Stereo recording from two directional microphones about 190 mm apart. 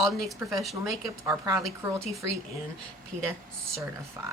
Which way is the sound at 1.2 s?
15° right (ahead or behind).